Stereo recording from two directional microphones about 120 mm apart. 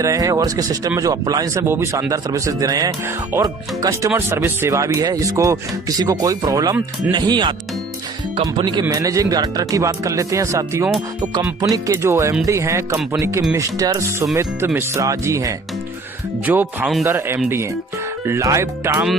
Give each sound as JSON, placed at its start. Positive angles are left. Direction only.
{"t": 0.0, "sound": "speech", "side_deg": -25}
{"t": 1.6, "sound": "speech", "side_deg": -20}
{"t": 8.8, "sound": "speech", "side_deg": -30}
{"t": 16.5, "sound": "speech", "side_deg": -15}